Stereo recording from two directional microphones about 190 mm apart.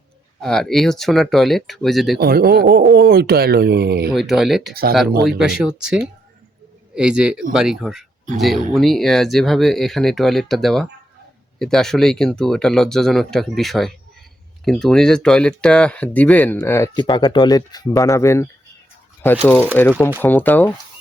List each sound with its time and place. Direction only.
0.4 s speech: centre (ahead or behind)
2.1 s speech: 55° right (ahead or behind)
4.1 s speech: centre (ahead or behind)
4.7 s speech: 55° right (ahead or behind)
5.4 s speech: 5° right (ahead or behind); by 18.4 s 15° left (ahead or behind)
19.7 s speech: 10° left (ahead or behind)